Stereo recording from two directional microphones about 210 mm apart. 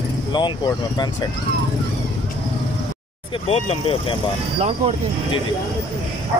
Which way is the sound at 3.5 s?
25° left (ahead or behind).